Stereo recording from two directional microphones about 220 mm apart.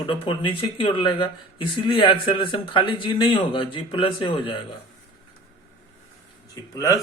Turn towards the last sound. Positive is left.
turn(degrees=15)  # may be behind; listen again after turning